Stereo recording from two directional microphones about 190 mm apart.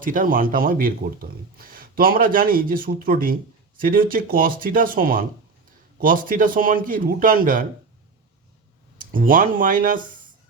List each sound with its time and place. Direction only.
0.0 s a man's voice: 45° right (ahead or behind)
9.0 s speech: 45° right (ahead or behind)